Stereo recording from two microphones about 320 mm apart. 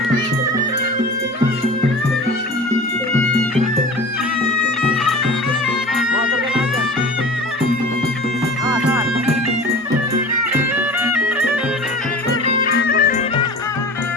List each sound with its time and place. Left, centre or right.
11.0 s music: centre
12.7 s music: left